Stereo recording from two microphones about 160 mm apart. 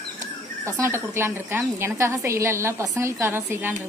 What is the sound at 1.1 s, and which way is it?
Speech, 15° right (ahead or behind).